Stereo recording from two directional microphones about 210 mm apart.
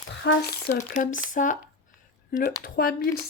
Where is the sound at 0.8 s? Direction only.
40° left (ahead or behind).